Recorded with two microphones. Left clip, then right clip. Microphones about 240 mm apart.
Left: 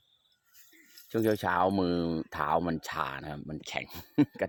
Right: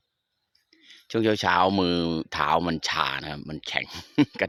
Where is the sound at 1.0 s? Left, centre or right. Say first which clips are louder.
Right 6 dB; centre.